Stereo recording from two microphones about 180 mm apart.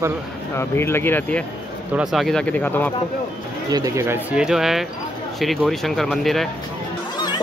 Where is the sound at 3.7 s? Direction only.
15° right (ahead or behind); by 6.5 s centre (ahead or behind).